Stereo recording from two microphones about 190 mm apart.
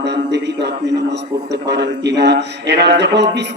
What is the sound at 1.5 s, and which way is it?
Speech, 65° right (ahead or behind).